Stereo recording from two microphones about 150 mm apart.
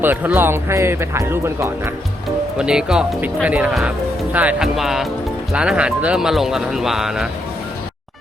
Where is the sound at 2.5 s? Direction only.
5° right (ahead or behind).